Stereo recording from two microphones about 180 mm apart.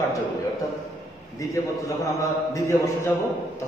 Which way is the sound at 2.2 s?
15° left (ahead or behind).